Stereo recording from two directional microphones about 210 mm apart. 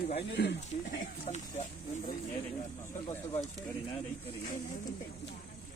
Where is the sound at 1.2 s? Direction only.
30° left (ahead or behind).